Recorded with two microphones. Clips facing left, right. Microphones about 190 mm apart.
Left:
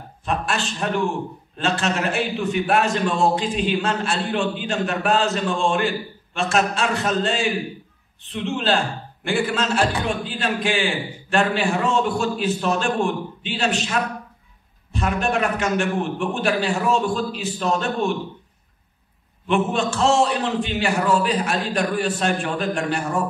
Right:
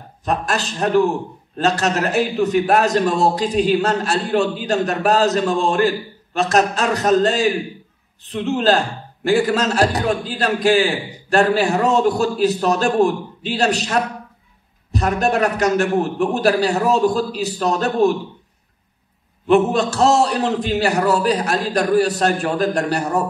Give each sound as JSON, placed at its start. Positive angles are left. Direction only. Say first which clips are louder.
{"t": 0.2, "sound": "a man's voice", "louder": "right 3 dB", "side_deg": -40}
{"t": 19.4, "sound": "a man's voice", "louder": "right 6 dB", "side_deg": -40}